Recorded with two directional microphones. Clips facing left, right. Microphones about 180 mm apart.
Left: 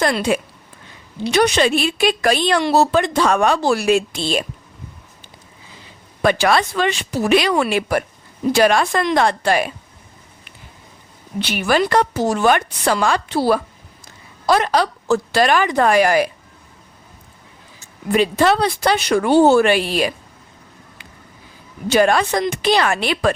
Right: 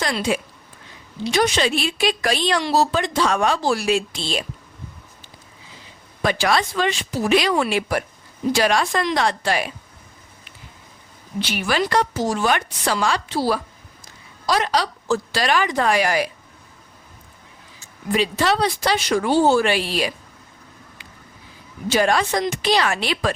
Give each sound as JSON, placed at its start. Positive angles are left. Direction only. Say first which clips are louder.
{"t": 0.0, "sound": "a woman's voice", "louder": "left 4 dB", "side_deg": 55}
{"t": 6.2, "sound": "a woman's voice", "louder": "left 4 dB", "side_deg": 60}
{"t": 11.3, "sound": "a woman's voice", "louder": "left 4 dB", "side_deg": 60}
{"t": 18.1, "sound": "a woman's voice", "louder": "left 5 dB", "side_deg": 55}
{"t": 21.8, "sound": "a woman's voice", "louder": "left 4 dB", "side_deg": 60}